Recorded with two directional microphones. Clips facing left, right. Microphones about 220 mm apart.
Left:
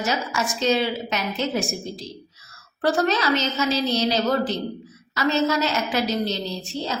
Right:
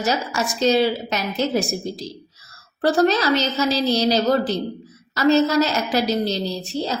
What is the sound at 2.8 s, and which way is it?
A woman's voice, 35° right (ahead or behind).